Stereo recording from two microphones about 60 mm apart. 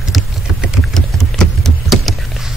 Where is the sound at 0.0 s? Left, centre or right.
Centre.